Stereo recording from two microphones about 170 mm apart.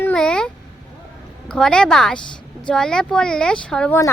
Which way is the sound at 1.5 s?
5° left (ahead or behind).